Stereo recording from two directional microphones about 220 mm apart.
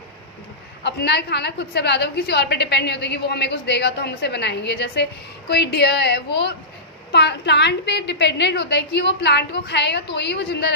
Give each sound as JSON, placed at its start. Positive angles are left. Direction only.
{"t": 0.9, "sound": "a woman's voice", "side_deg": 50}